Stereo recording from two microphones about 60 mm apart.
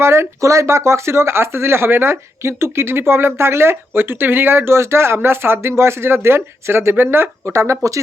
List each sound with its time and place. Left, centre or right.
0.0 s speech: right
7.5 s speech: right